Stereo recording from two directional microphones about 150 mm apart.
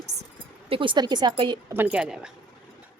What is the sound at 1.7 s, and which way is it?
Speech, 10° right (ahead or behind).